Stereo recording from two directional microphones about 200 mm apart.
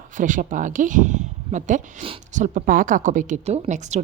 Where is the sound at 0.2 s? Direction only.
40° right (ahead or behind).